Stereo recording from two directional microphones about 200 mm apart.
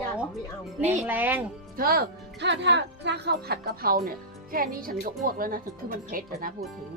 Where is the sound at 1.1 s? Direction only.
10° right (ahead or behind).